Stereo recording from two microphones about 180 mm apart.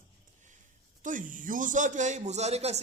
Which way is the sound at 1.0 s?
45° right (ahead or behind).